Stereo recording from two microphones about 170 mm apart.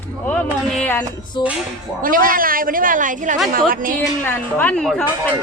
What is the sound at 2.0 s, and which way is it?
A woman's voice, 55° right (ahead or behind).